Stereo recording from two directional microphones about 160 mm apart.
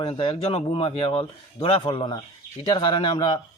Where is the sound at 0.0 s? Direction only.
30° left (ahead or behind).